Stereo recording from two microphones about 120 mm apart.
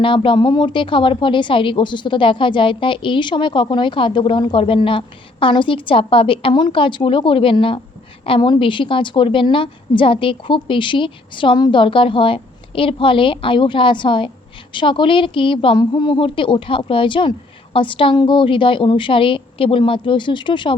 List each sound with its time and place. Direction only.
0.0 s a woman's voice: 45° left (ahead or behind)